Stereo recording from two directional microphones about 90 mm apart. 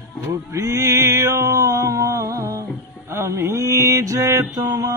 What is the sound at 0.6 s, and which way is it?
Music, 40° right (ahead or behind).